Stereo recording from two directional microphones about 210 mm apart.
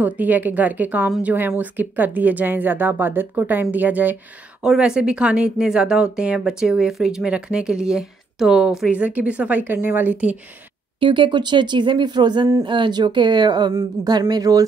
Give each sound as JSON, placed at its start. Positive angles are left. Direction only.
{"t": 0.0, "sound": "a woman's voice", "side_deg": -10}
{"t": 11.0, "sound": "speech", "side_deg": -25}